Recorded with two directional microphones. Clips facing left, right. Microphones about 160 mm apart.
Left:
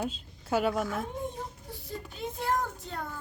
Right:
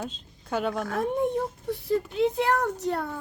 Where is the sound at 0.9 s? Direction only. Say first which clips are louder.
Right 8 dB; 70° right (ahead or behind).